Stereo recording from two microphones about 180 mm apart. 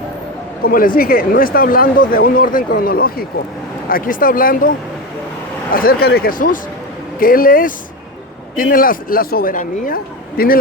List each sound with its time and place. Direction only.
0.6 s speech: 50° left (ahead or behind)
5.7 s speech: 55° left (ahead or behind)